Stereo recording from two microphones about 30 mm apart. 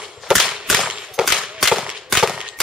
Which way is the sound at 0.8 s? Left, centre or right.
Right.